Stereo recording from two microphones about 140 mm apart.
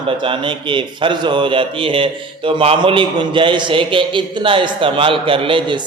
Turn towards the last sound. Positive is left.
turn(degrees=-35)  # may be behind; listen again after turning